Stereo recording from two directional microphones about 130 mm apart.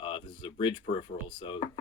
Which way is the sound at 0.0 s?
40° left (ahead or behind).